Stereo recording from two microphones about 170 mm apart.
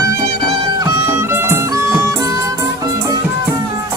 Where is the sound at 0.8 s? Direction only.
20° right (ahead or behind).